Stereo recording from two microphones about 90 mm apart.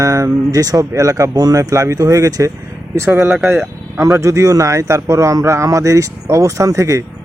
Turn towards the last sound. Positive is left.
turn(degrees=-35)  # may be behind; listen again after turning